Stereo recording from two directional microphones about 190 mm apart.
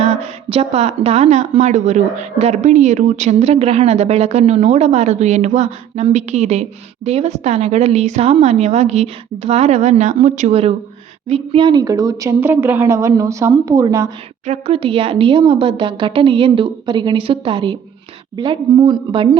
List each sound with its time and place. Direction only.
0.0 s a woman's voice: 30° right (ahead or behind)
14.4 s a woman's voice: 35° right (ahead or behind)